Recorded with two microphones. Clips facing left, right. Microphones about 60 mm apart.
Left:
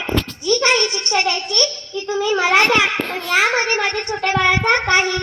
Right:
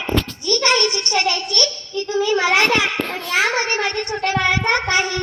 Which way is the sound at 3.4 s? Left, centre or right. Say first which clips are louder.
Even; left.